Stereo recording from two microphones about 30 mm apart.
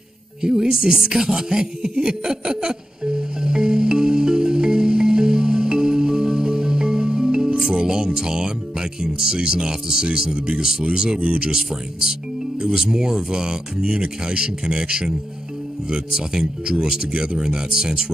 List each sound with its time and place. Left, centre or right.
0.4 s speech: right
3.0 s music: right
9.3 s speech: right
11.2 s speech: right
11.5 s speech: right